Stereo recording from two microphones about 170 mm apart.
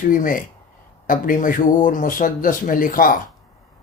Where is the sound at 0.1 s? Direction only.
50° left (ahead or behind).